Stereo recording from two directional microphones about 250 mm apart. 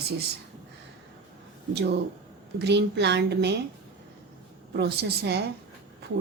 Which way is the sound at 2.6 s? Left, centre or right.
Right.